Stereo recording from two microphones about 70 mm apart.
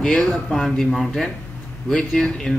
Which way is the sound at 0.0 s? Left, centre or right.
Centre.